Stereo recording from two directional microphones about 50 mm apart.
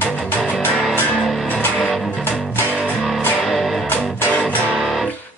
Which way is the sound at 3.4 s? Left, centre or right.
Centre.